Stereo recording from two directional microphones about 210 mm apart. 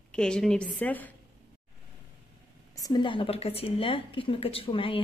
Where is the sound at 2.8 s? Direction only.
20° left (ahead or behind).